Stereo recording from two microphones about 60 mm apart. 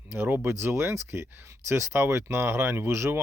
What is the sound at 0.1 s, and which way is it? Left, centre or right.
Speech, right.